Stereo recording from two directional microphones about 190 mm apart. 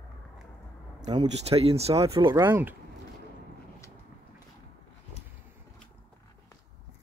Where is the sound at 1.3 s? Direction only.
30° right (ahead or behind).